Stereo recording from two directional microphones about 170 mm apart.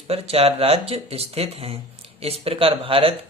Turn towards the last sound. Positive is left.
turn(degrees=-35)  # may be behind; listen again after turning